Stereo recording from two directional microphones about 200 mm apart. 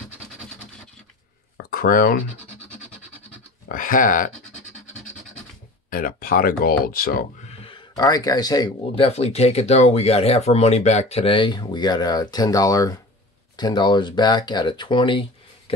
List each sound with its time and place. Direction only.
1.6 s a sound: 45° left (ahead or behind)
3.6 s speech: 45° left (ahead or behind)
5.9 s speech: 45° left (ahead or behind)
7.4 s speech: 25° left (ahead or behind)